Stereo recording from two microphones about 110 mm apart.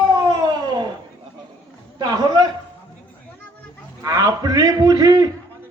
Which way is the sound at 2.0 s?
35° right (ahead or behind).